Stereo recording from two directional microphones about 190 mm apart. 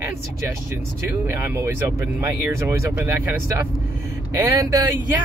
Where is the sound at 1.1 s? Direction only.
10° right (ahead or behind).